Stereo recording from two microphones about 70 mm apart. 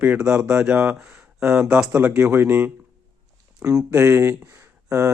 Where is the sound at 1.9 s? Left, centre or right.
Right.